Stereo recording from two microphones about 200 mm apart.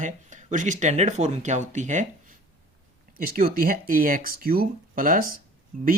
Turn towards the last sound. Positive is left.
turn(degrees=-40)  # may be behind; listen again after turning